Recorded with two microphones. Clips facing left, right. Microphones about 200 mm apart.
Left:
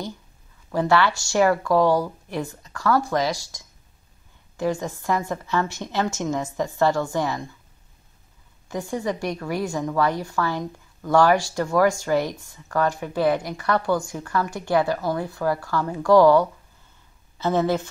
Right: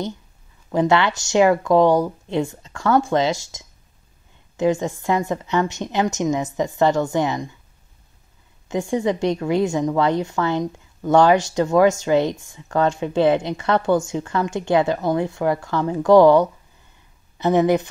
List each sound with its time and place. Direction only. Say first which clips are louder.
0.7 s a woman's voice: right 2 dB; 20° right (ahead or behind)
8.6 s a woman's voice: right 6 dB; 20° right (ahead or behind)